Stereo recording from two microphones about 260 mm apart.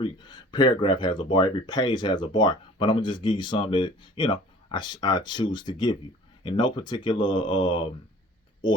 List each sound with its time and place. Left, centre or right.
0.0 s speech: centre